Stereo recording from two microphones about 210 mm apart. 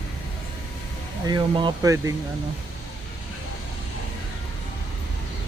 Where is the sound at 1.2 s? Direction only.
20° right (ahead or behind).